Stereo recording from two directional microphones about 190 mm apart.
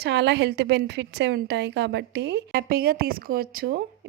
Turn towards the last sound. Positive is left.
turn(degrees=-50)  # may be behind; listen again after turning